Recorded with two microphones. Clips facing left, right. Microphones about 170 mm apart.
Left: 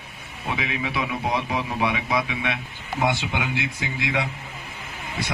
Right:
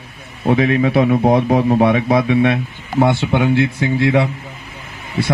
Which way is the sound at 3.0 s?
35° right (ahead or behind).